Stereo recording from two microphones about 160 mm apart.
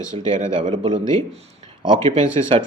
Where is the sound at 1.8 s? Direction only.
30° right (ahead or behind).